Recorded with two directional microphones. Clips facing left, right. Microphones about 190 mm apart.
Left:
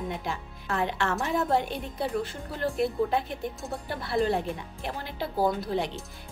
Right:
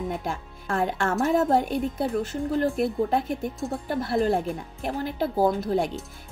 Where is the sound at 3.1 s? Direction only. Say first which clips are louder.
Right 4 dB; 50° right (ahead or behind).